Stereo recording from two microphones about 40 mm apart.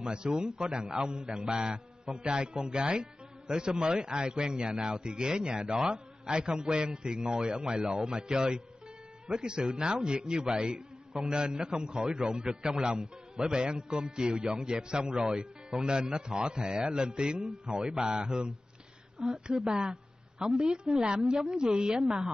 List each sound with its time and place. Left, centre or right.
0.0 s a man's voice: right